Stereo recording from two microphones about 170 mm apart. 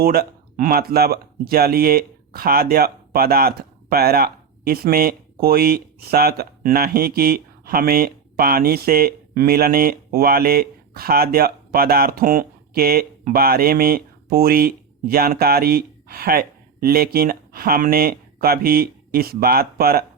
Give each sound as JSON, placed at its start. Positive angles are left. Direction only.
{"t": 0.0, "sound": "speech", "side_deg": -65}